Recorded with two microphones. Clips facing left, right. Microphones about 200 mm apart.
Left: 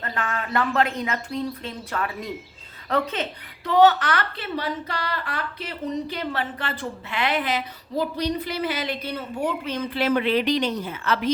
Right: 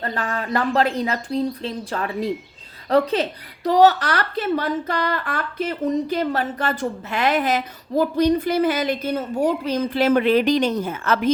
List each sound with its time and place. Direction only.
0.0 s speech: 35° right (ahead or behind)